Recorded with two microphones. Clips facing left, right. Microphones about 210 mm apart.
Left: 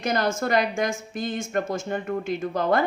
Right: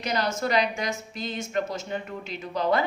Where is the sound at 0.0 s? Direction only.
50° left (ahead or behind).